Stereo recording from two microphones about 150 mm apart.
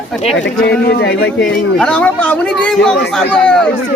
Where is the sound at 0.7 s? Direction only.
90° left.